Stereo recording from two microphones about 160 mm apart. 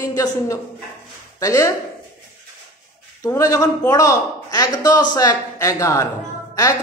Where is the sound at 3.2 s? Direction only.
20° left (ahead or behind).